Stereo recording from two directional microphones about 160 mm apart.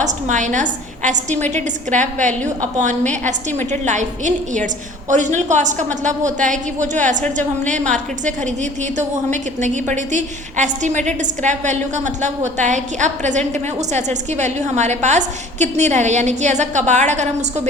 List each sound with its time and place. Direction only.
0.0 s a woman's voice: 50° right (ahead or behind)